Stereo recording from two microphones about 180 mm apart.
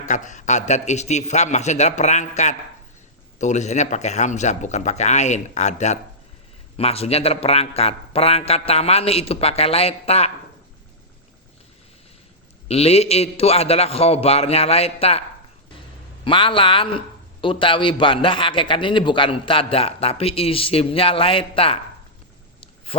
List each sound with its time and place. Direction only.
0.1 s a man's voice: 45° left (ahead or behind)
12.6 s a man's voice: 35° left (ahead or behind)
16.2 s a man's voice: 30° left (ahead or behind)